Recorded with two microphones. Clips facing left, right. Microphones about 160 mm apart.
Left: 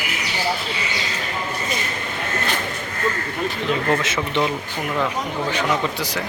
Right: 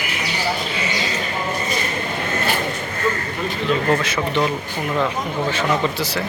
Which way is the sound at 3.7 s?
20° left (ahead or behind).